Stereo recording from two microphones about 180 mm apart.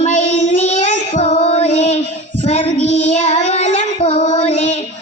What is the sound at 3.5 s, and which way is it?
Child singing, 40° left (ahead or behind).